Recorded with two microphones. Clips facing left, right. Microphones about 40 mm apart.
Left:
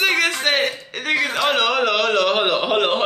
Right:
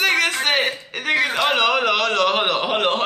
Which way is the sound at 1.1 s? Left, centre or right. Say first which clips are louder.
Even; centre.